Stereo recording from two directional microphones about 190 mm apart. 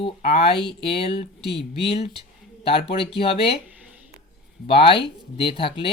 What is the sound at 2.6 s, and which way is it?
Mantra, 30° left (ahead or behind).